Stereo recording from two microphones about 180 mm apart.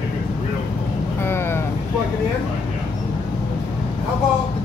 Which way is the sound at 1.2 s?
15° left (ahead or behind).